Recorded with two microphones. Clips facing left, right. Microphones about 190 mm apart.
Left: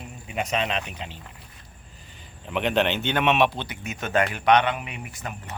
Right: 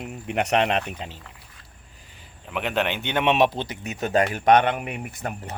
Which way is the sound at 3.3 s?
40° right (ahead or behind).